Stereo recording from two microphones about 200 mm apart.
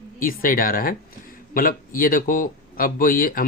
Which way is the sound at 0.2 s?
45° left (ahead or behind).